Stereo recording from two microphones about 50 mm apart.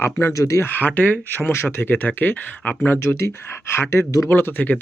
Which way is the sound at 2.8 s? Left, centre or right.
Left.